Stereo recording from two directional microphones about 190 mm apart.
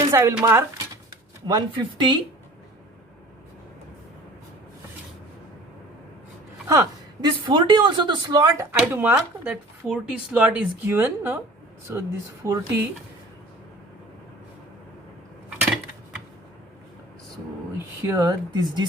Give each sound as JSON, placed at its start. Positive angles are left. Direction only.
{"t": 0.1, "sound": "speech", "side_deg": -15}
{"t": 1.5, "sound": "speech", "side_deg": -20}
{"t": 6.7, "sound": "speech", "side_deg": -20}
{"t": 17.7, "sound": "speech", "side_deg": -15}